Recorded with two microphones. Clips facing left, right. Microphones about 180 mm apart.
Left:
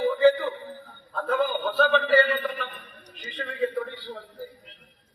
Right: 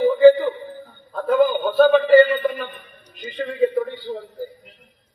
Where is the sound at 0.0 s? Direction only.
40° right (ahead or behind).